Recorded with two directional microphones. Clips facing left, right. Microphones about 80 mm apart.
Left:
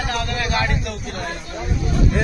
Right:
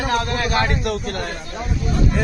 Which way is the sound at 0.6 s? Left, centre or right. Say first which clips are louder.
Right 3 dB; right.